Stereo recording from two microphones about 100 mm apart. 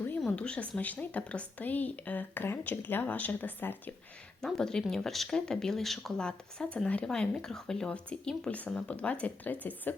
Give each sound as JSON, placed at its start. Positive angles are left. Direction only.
{"t": 0.2, "sound": "speech", "side_deg": 10}
{"t": 4.4, "sound": "speech", "side_deg": 5}